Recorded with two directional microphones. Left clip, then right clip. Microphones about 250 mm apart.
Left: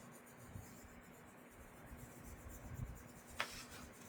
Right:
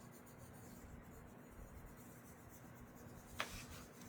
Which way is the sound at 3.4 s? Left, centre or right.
Centre.